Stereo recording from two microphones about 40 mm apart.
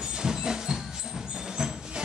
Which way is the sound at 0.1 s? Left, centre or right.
Centre.